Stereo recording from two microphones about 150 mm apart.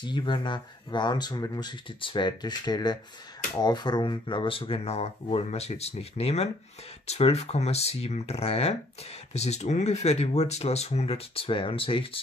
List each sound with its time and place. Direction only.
0.0 s speech: 30° left (ahead or behind)